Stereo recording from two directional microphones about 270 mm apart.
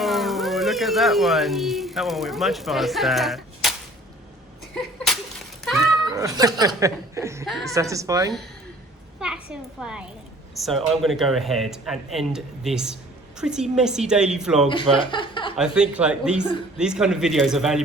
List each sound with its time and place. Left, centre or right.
0.0 s speech: centre
6.1 s speech: centre
7.4 s speech: centre
7.7 s a woman's voice: centre
14.7 s speech: centre
15.5 s speech: centre